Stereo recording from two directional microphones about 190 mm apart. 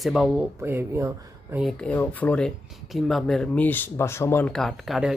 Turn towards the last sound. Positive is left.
turn(degrees=0)  # may be behind; listen again after turning